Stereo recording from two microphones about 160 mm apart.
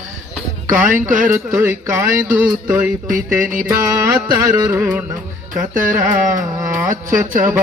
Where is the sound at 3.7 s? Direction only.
20° right (ahead or behind).